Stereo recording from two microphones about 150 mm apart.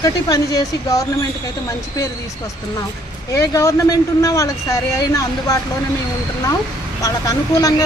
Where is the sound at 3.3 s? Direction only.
20° left (ahead or behind).